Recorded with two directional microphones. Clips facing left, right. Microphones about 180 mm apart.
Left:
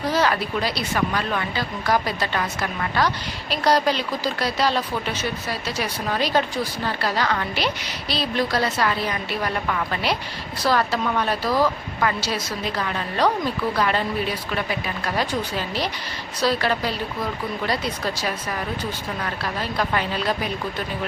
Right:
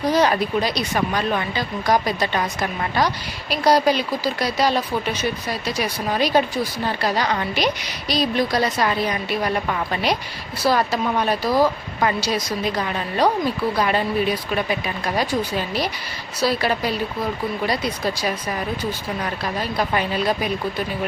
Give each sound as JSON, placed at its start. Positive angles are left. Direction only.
{"t": 0.0, "sound": "speech", "side_deg": -15}